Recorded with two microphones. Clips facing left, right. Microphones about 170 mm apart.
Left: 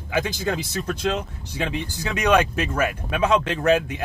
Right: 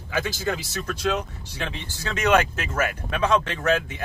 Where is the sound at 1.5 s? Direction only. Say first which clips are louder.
Left 6 dB; 15° left (ahead or behind).